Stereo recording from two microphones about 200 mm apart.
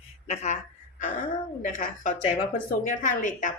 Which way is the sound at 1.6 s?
40° left (ahead or behind).